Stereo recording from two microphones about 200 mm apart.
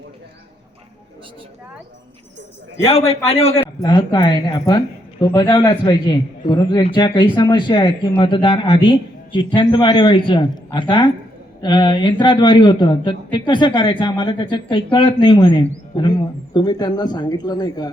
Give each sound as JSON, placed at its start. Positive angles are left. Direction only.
{"t": 2.8, "sound": "a man's voice", "side_deg": 30}